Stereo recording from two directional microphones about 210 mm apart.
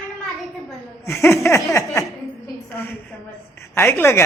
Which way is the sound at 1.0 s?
15° left (ahead or behind).